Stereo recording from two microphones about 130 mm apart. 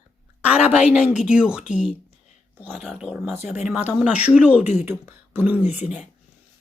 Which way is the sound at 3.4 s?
55° left (ahead or behind).